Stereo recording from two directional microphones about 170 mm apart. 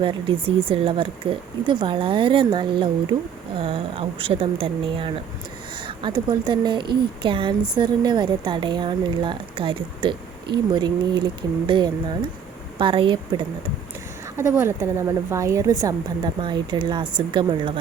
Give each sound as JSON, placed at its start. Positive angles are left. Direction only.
{"t": 0.0, "sound": "speech", "side_deg": -30}
{"t": 14.3, "sound": "speech", "side_deg": -15}